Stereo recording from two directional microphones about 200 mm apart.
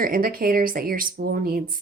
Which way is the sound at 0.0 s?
45° right (ahead or behind).